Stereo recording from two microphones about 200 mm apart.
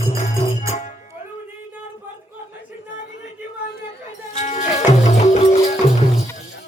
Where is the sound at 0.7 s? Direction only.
35° left (ahead or behind).